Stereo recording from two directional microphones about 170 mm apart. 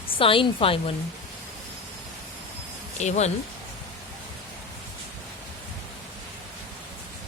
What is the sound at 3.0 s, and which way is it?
Speech, 40° left (ahead or behind).